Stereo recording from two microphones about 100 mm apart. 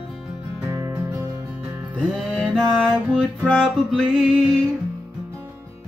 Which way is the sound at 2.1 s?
10° left (ahead or behind).